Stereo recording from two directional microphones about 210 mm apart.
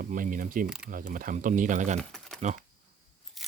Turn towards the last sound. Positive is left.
turn(degrees=0)  # may be behind; listen again after turning